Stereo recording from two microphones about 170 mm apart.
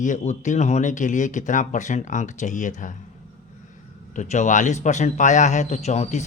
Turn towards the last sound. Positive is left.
turn(degrees=40)  # may be behind; listen again after turning